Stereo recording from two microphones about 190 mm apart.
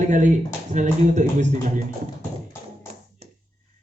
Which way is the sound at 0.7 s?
40° right (ahead or behind).